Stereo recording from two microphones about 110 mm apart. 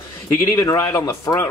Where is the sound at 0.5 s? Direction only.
25° left (ahead or behind).